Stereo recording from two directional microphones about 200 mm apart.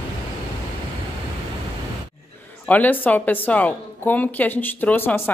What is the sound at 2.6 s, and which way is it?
A woman's voice, 10° left (ahead or behind).